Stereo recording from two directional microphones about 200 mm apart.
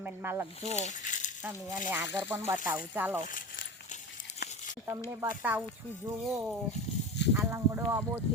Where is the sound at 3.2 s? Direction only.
40° left (ahead or behind).